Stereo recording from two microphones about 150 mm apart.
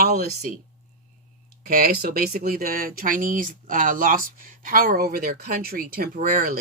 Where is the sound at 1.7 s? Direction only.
75° right (ahead or behind).